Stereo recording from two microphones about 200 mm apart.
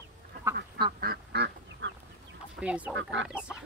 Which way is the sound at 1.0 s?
55° right (ahead or behind).